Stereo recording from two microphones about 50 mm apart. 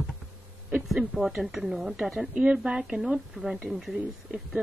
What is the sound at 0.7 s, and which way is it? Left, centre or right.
Speech, centre.